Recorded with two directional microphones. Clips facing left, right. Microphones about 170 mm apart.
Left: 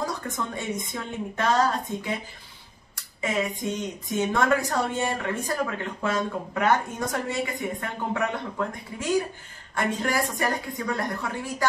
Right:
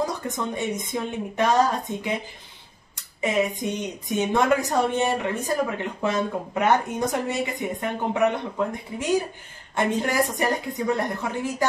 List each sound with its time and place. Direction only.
0.2 s speech: 15° right (ahead or behind)
3.2 s a woman's voice: 20° right (ahead or behind)